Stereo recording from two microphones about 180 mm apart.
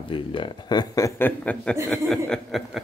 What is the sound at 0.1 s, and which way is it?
A man's voice, 30° left (ahead or behind).